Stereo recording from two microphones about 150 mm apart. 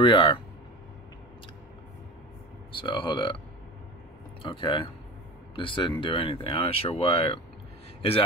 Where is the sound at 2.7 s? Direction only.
35° left (ahead or behind).